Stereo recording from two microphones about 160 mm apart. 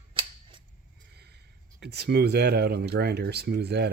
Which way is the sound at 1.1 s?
90° right.